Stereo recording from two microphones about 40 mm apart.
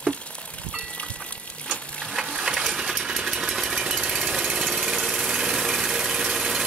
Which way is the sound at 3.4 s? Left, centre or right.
Centre.